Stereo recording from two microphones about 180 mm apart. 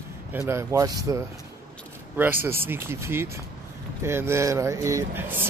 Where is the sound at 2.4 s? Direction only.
10° right (ahead or behind).